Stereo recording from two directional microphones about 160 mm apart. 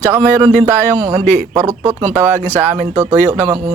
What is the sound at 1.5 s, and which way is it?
Speech, 15° right (ahead or behind).